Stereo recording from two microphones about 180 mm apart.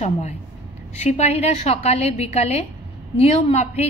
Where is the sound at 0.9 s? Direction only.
35° left (ahead or behind).